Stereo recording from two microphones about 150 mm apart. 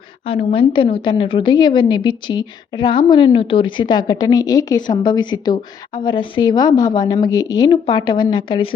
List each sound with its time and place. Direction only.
0.3 s a woman's voice: 40° left (ahead or behind)